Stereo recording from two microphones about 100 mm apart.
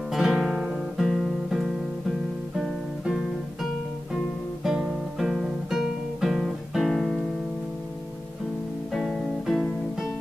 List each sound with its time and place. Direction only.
0.1 s guitar: 5° right (ahead or behind)
4.6 s guitar: 5° right (ahead or behind)
8.9 s music: centre (ahead or behind)